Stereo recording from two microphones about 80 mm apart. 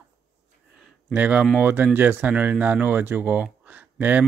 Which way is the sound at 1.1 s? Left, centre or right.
Centre.